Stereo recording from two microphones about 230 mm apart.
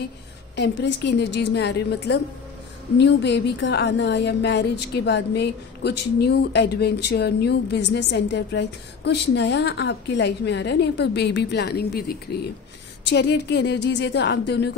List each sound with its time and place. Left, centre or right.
1.0 s a woman's voice: left